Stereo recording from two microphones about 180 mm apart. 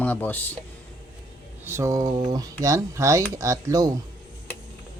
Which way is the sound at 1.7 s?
15° right (ahead or behind).